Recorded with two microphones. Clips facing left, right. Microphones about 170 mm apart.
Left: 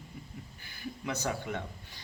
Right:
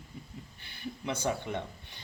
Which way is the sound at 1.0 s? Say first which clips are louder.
Right 2 dB; 25° right (ahead or behind).